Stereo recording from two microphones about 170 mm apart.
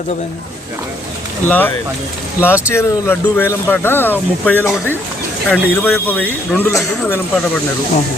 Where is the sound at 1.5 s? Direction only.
10° left (ahead or behind).